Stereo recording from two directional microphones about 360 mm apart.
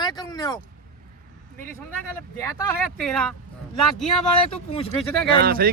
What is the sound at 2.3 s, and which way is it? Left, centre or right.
Speech, centre.